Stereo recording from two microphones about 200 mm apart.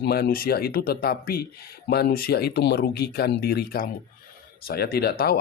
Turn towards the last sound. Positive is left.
turn(degrees=50)  # may be behind; listen again after turning